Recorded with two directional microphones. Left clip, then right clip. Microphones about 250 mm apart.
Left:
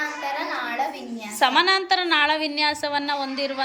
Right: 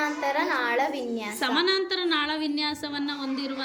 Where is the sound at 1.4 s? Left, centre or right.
Centre.